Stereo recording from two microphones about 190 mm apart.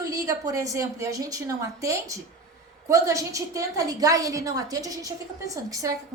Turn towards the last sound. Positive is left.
turn(degrees=-20)  # may be behind; listen again after turning